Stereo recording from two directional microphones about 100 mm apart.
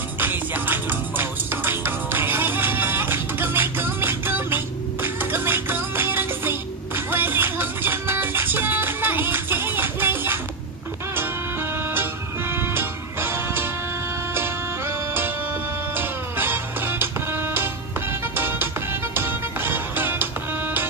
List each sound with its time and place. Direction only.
0.2 s music: 20° right (ahead or behind)
11.9 s music: 20° right (ahead or behind)